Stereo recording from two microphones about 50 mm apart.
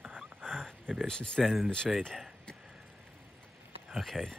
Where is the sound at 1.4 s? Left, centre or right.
Centre.